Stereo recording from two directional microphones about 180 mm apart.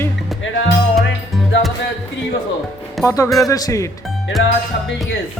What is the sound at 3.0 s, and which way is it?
Music, 20° left (ahead or behind).